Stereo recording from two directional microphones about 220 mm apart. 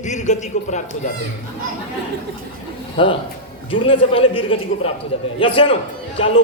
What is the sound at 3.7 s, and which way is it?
A man's voice, 25° left (ahead or behind).